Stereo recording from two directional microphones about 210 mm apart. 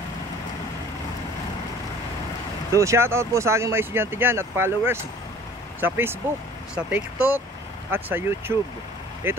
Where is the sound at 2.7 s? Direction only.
15° right (ahead or behind).